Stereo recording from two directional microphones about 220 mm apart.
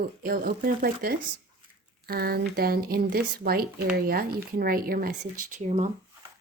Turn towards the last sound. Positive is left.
turn(degrees=-30)  # may be behind; listen again after turning